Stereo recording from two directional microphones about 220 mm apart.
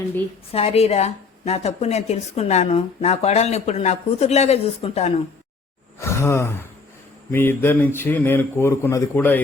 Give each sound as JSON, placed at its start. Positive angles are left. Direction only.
{"t": 0.5, "sound": "a woman's voice", "side_deg": 25}
{"t": 6.0, "sound": "a man's voice", "side_deg": 10}